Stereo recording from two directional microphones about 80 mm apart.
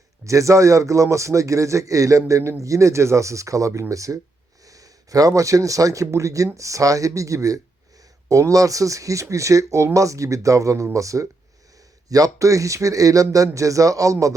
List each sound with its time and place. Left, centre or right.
0.3 s a man's voice: right